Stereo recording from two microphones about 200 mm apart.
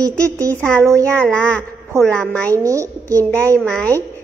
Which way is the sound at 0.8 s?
15° right (ahead or behind).